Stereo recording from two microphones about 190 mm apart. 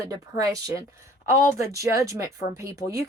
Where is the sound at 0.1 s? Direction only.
20° right (ahead or behind).